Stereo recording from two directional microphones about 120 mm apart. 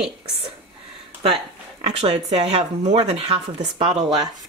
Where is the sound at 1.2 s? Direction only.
50° right (ahead or behind).